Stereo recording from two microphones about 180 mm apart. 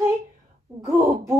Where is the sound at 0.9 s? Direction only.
20° right (ahead or behind).